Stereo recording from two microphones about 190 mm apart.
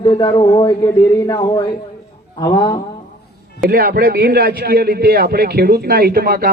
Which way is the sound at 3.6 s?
50° right (ahead or behind).